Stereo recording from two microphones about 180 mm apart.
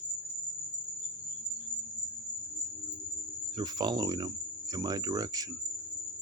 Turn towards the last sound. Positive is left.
turn(degrees=-20)  # may be behind; listen again after turning